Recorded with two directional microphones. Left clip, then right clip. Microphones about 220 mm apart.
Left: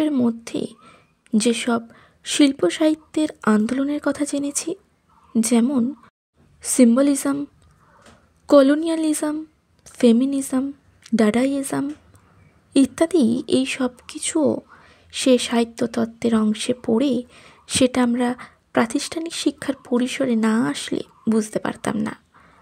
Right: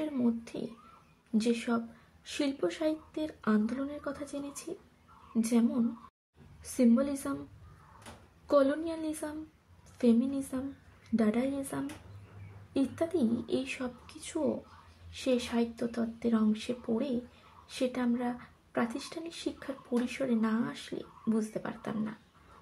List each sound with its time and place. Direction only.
0.0 s a child's voice: 40° left (ahead or behind)
8.5 s speech: 45° left (ahead or behind)